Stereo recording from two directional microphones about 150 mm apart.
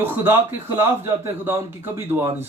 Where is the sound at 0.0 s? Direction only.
15° right (ahead or behind).